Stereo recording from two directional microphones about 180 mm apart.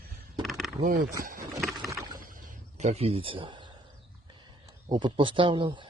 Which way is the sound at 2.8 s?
35° right (ahead or behind).